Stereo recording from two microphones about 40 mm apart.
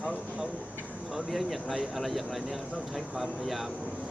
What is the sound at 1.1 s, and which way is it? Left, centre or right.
Speech, centre.